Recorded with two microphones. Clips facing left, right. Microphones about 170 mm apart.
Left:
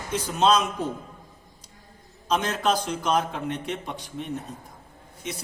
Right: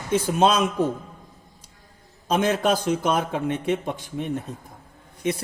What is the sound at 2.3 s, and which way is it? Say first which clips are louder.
A man's voice: right 3 dB; 55° right (ahead or behind).